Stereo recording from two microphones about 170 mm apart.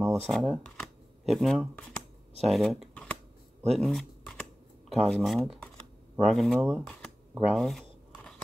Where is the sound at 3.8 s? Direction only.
Centre (ahead or behind).